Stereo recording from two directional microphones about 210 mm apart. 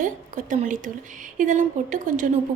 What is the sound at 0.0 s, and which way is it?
A woman's voice, 35° right (ahead or behind).